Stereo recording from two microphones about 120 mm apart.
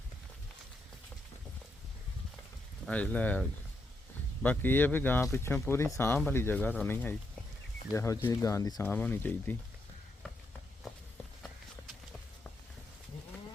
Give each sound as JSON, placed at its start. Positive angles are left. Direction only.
{"t": 2.9, "sound": "speech", "side_deg": 10}
{"t": 4.4, "sound": "speech", "side_deg": 15}
{"t": 8.8, "sound": "speech", "side_deg": 15}